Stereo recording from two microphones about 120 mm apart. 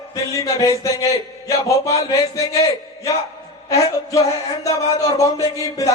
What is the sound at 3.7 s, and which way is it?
Music, 25° left (ahead or behind).